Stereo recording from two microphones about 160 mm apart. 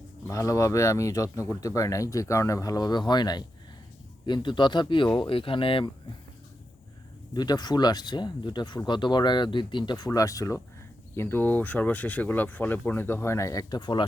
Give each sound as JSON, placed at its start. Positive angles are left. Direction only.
{"t": 0.3, "sound": "speech", "side_deg": 20}
{"t": 7.3, "sound": "speech", "side_deg": 25}